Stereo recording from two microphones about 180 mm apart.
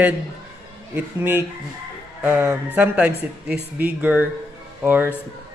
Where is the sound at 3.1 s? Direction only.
65° right (ahead or behind).